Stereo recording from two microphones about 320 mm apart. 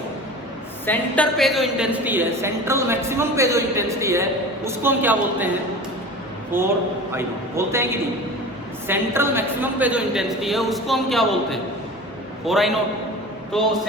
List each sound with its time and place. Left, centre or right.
0.9 s a woman's voice: centre
6.5 s a woman's voice: centre
8.9 s a woman's voice: centre